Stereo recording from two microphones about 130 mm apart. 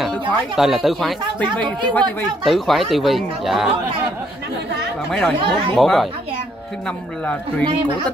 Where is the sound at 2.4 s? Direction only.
Centre (ahead or behind).